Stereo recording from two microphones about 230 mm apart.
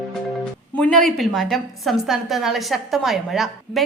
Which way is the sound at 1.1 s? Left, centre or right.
Centre.